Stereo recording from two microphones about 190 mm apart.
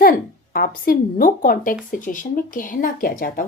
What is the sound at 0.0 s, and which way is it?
A woman's voice, 50° left (ahead or behind).